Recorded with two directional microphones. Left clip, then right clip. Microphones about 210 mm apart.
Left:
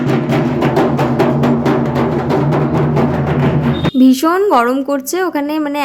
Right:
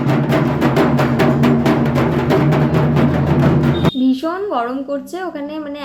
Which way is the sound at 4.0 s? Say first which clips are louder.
Left 7 dB; 50° left (ahead or behind).